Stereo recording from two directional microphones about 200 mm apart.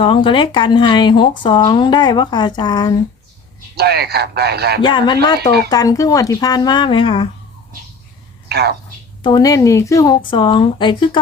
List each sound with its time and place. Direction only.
0.0 s speech: 25° left (ahead or behind)
3.8 s a man's voice: 55° right (ahead or behind)
4.8 s speech: 25° left (ahead or behind)
8.4 s a woman's voice: 55° right (ahead or behind)
9.2 s speech: 20° left (ahead or behind)